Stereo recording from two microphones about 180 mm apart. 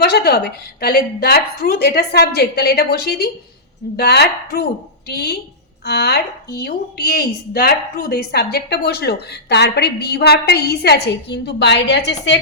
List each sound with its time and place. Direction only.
0.0 s a woman's voice: 60° left (ahead or behind)